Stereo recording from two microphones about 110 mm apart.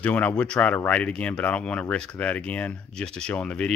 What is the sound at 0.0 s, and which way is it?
Speech, 15° left (ahead or behind).